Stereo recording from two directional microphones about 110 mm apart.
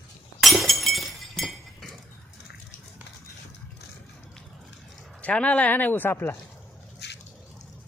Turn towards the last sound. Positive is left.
turn(degrees=20)  # may be behind; listen again after turning